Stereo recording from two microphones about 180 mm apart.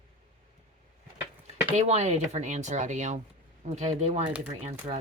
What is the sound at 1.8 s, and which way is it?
Speech, 40° right (ahead or behind).